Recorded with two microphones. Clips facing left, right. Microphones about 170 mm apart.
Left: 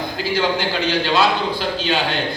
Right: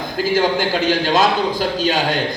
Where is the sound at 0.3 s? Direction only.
45° right (ahead or behind).